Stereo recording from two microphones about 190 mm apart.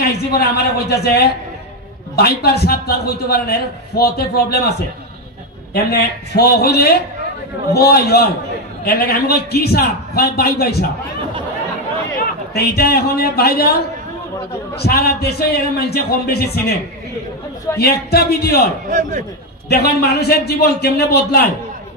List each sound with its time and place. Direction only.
0.0 s a man's voice: 55° left (ahead or behind)
12.5 s a man's voice: 55° left (ahead or behind)
17.7 s a man's voice: 55° left (ahead or behind)
18.9 s a man's voice: 40° right (ahead or behind)
19.7 s a man's voice: 55° left (ahead or behind)